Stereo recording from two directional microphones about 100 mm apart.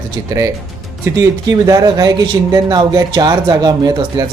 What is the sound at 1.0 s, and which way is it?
Speech, 30° right (ahead or behind).